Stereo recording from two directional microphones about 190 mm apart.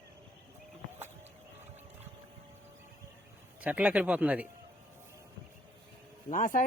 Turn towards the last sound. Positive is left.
turn(degrees=45)  # may be behind; listen again after turning